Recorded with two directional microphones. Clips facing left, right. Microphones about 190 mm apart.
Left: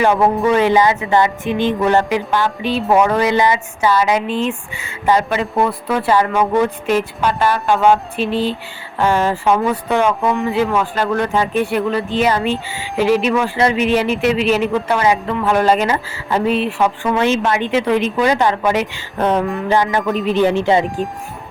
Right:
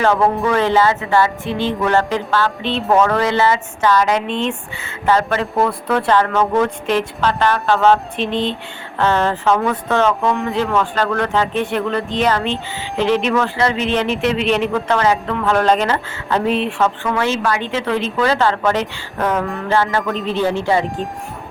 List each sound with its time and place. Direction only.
0.0 s a man's voice: 15° left (ahead or behind)
19.2 s a sound: 25° left (ahead or behind)
19.6 s a man's voice: 15° left (ahead or behind)